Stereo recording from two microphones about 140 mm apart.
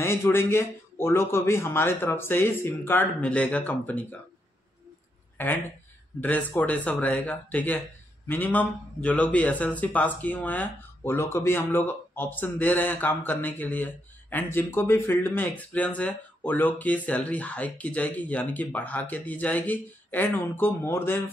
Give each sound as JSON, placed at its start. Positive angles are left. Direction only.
{"t": 0.0, "sound": "speech", "side_deg": 15}
{"t": 5.4, "sound": "speech", "side_deg": 15}